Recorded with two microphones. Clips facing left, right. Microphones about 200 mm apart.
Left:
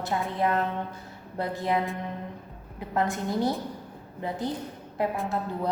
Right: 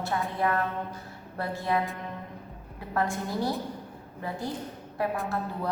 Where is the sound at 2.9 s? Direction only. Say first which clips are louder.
Left 2 dB; 20° left (ahead or behind).